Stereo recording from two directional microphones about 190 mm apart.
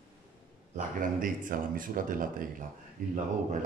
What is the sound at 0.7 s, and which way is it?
Speech, 45° right (ahead or behind).